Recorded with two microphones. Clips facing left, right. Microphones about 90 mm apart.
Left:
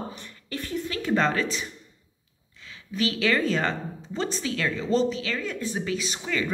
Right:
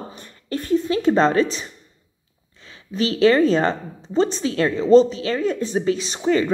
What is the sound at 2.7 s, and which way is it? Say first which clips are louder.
A woman's voice: right 5 dB; 30° right (ahead or behind).